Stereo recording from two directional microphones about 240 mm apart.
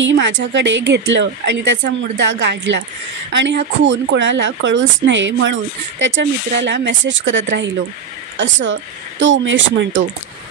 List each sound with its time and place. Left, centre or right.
0.0 s speech: right